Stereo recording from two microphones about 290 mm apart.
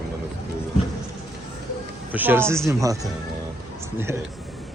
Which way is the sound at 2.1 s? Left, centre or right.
Centre.